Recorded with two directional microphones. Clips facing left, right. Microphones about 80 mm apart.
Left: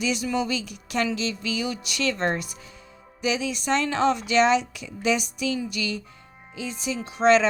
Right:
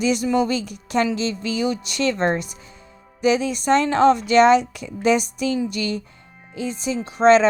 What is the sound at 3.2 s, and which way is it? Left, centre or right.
Speech, right.